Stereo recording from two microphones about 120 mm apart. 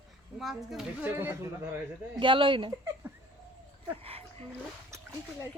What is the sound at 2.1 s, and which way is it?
Speech, 45° right (ahead or behind).